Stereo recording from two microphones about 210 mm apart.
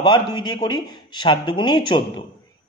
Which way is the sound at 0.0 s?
20° left (ahead or behind).